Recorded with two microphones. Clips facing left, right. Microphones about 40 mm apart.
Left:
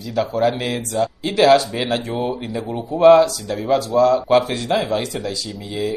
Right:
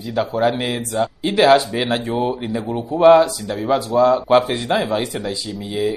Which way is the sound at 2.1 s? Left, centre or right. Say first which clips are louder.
Right 2 dB; centre.